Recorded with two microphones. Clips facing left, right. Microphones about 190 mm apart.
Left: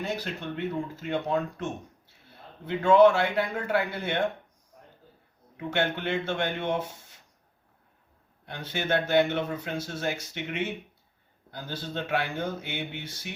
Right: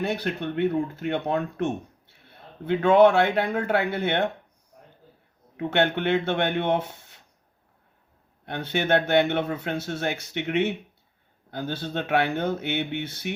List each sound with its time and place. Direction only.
0.0 s speech: 65° right (ahead or behind)
5.5 s speech: 65° right (ahead or behind)
8.4 s speech: 65° right (ahead or behind)